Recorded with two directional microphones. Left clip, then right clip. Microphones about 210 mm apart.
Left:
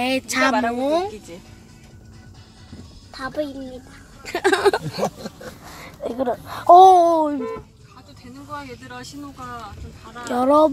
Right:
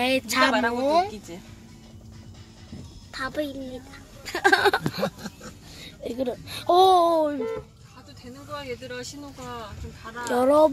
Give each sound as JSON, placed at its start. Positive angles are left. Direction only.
{"t": 0.0, "sound": "speech", "side_deg": 0}
{"t": 3.1, "sound": "a sound", "side_deg": -20}
{"t": 4.2, "sound": "speech", "side_deg": 0}
{"t": 6.0, "sound": "babbling", "side_deg": -15}
{"t": 10.2, "sound": "speech", "side_deg": -5}